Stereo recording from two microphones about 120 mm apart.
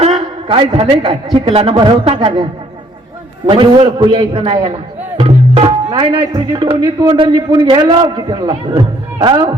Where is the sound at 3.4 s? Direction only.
45° right (ahead or behind).